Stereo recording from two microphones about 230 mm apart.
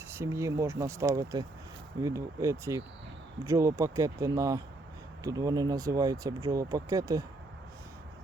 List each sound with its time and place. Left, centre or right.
0.1 s speech: centre